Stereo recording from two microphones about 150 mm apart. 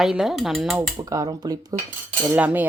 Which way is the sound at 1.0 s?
25° right (ahead or behind).